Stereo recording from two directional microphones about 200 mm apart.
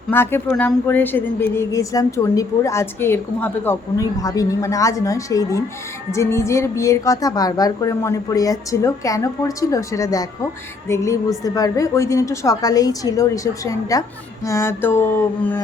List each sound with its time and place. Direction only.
0.1 s speech: 10° left (ahead or behind)